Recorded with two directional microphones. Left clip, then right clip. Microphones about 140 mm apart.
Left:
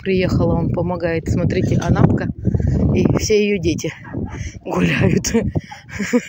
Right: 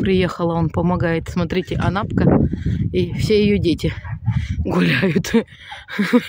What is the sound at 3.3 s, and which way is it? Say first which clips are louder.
Speech: right 3 dB; 15° right (ahead or behind).